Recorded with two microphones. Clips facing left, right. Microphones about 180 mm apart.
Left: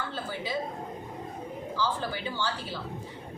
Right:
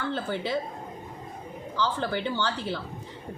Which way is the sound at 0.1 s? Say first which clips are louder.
Right 5 dB; 70° right (ahead or behind).